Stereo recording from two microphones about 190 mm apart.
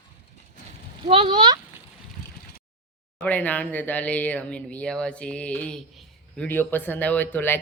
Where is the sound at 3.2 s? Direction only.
10° left (ahead or behind).